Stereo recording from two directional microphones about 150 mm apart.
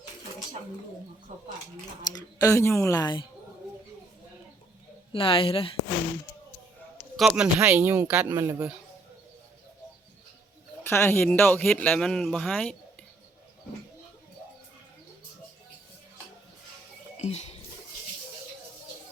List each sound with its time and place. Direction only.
2.0 s speech: 25° left (ahead or behind)
5.1 s speech: 35° left (ahead or behind)
7.2 s speech: 5° right (ahead or behind)
8.3 s speech: 20° right (ahead or behind)
10.8 s speech: 15° left (ahead or behind)
17.2 s a sound: 45° left (ahead or behind)